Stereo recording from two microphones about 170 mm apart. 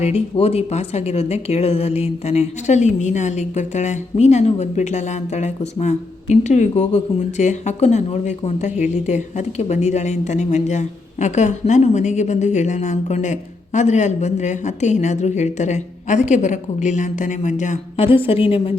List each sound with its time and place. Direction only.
0.0 s a woman's voice: 35° left (ahead or behind)
18.0 s a woman's voice: 35° left (ahead or behind)